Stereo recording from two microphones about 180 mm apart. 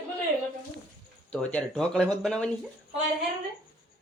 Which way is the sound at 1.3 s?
5° left (ahead or behind).